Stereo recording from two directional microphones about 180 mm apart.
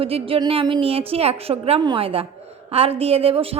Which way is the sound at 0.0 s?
30° right (ahead or behind).